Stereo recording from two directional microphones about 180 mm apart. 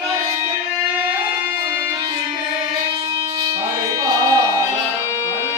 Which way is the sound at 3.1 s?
25° right (ahead or behind).